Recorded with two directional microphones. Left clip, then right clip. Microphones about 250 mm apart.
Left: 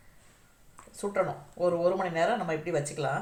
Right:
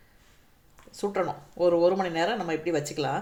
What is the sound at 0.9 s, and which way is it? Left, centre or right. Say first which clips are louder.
Speech: right 1 dB; right.